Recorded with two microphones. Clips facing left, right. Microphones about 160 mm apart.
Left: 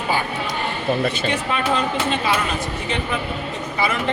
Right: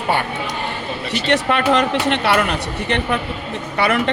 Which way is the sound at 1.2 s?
75° right (ahead or behind).